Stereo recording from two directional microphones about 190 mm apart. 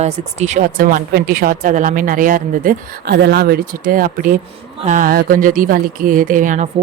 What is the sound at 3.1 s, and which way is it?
Speech, 60° right (ahead or behind).